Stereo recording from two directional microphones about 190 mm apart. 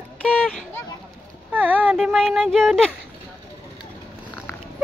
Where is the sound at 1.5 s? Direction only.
10° right (ahead or behind).